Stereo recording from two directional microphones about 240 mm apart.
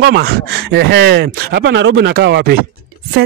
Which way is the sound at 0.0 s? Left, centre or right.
Right.